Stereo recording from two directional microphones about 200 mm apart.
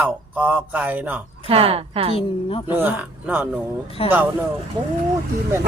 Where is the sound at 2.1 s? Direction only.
30° left (ahead or behind).